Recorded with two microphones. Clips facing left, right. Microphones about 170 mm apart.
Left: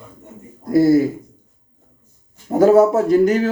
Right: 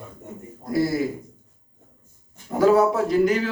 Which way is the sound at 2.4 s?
45° left (ahead or behind).